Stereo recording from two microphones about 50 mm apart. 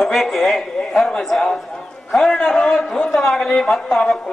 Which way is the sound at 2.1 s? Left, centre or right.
Centre.